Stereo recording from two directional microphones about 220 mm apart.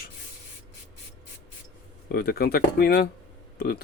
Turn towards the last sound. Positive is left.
turn(degrees=40)  # may be behind; listen again after turning